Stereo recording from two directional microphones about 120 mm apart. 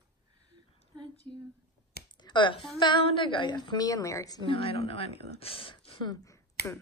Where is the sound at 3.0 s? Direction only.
45° left (ahead or behind).